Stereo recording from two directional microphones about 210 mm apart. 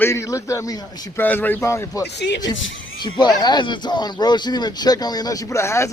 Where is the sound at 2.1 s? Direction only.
55° left (ahead or behind).